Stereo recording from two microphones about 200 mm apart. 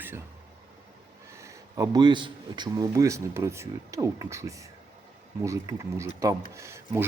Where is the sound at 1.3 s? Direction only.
15° right (ahead or behind).